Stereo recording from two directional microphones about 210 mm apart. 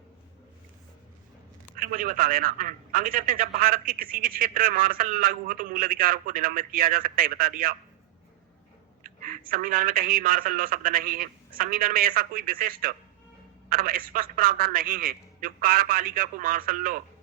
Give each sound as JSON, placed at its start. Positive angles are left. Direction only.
{"t": 1.7, "sound": "a man's voice", "side_deg": -40}
{"t": 9.0, "sound": "a man's voice", "side_deg": -40}